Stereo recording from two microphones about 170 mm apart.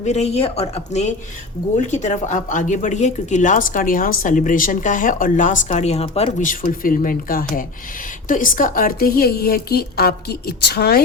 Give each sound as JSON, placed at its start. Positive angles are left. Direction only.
{"t": 0.0, "sound": "a woman's voice", "side_deg": 40}